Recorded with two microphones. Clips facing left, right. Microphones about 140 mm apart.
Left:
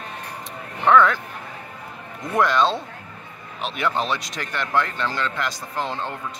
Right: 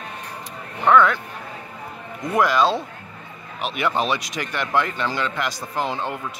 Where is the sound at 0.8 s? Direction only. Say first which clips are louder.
Even; centre (ahead or behind).